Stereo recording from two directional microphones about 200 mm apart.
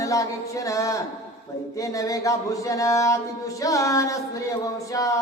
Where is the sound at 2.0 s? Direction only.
15° left (ahead or behind).